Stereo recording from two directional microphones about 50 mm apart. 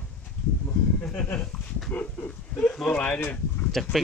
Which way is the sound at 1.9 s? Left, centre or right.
Left.